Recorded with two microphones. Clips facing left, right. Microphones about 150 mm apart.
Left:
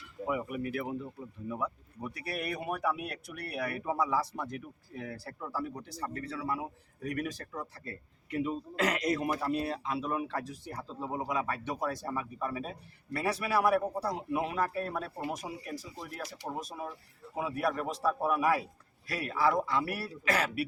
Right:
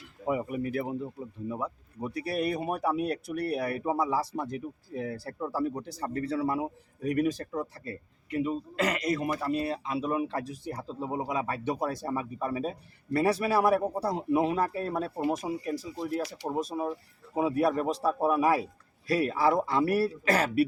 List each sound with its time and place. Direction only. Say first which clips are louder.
0.3 s speech: right 4 dB; 30° right (ahead or behind)
7.9 s speech: right 4 dB; 5° right (ahead or behind); by 20.7 s 40° right (ahead or behind)